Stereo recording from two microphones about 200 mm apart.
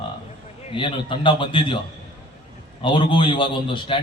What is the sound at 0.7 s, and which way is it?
A man's voice, 25° left (ahead or behind).